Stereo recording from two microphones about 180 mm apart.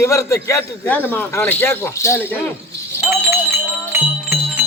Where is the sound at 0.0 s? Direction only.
15° left (ahead or behind).